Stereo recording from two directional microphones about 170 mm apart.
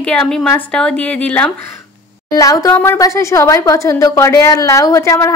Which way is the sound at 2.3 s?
20° left (ahead or behind).